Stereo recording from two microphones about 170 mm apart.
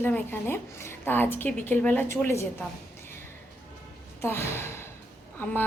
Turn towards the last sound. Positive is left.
turn(degrees=10)  # may be behind; listen again after turning